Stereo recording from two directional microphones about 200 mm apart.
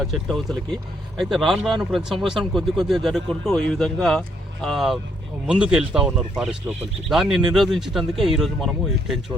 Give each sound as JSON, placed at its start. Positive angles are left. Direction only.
{"t": 0.0, "sound": "speech", "side_deg": 0}